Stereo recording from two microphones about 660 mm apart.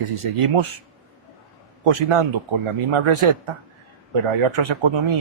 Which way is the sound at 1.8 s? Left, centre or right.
Right.